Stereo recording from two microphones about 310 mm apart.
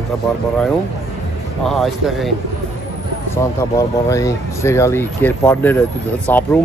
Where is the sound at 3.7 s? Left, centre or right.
Centre.